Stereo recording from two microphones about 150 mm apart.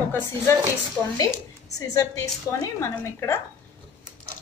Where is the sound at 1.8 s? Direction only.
25° left (ahead or behind).